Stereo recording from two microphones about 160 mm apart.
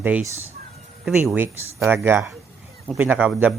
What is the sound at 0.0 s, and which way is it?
Speech, 10° right (ahead or behind).